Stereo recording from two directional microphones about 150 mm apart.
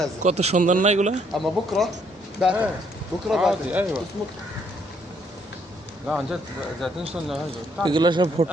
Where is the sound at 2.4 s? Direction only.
5° right (ahead or behind).